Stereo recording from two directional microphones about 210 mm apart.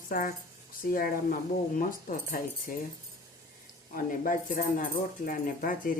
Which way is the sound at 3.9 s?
40° left (ahead or behind).